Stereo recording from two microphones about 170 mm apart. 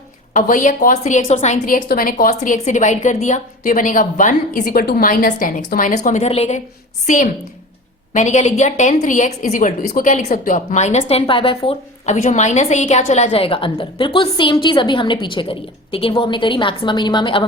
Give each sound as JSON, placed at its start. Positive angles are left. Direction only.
{"t": 0.3, "sound": "a woman's voice", "side_deg": 50}
{"t": 8.1, "sound": "a woman's voice", "side_deg": 45}